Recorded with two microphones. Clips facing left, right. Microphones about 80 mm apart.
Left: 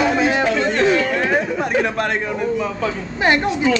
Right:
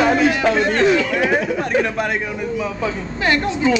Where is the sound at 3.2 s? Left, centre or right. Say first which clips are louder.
Left 2 dB; left.